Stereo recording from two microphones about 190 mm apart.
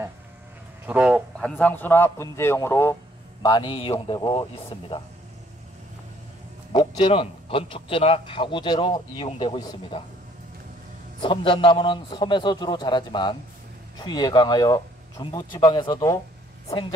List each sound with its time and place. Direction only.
0.8 s speech: 5° right (ahead or behind)
1.4 s a man's voice: 10° left (ahead or behind)
3.4 s a man's voice: 25° left (ahead or behind)
6.7 s a man's voice: 25° left (ahead or behind)
11.1 s a man's voice: 25° left (ahead or behind)